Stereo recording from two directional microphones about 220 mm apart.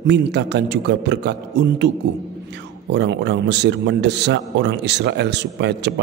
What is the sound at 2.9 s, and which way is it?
A man's voice, 50° right (ahead or behind).